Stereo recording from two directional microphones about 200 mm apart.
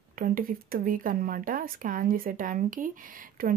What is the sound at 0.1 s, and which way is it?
Speech, 45° right (ahead or behind).